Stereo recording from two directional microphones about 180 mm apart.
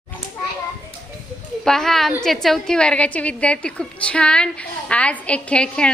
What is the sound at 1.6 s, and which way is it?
A woman's voice, 5° left (ahead or behind).